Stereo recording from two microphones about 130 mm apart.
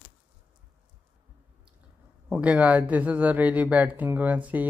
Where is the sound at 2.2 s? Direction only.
10° right (ahead or behind).